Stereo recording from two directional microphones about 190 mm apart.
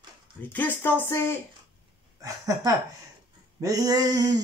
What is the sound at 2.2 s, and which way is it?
A man's voice, 15° right (ahead or behind).